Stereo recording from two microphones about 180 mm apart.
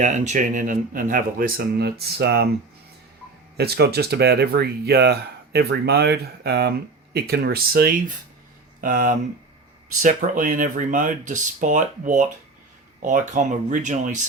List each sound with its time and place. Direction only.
0.0 s speech: 40° right (ahead or behind); by 2.5 s 65° right (ahead or behind)
3.6 s speech: 65° right (ahead or behind); by 14.2 s 45° right (ahead or behind)